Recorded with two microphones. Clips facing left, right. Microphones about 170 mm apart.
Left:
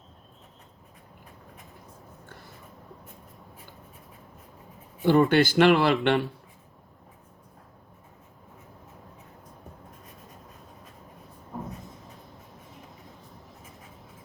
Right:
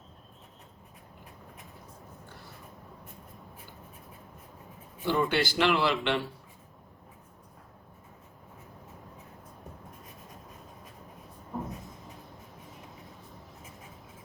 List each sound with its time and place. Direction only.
5.0 s speech: 50° left (ahead or behind)